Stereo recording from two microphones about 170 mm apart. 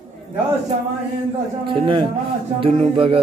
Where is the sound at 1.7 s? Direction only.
30° right (ahead or behind).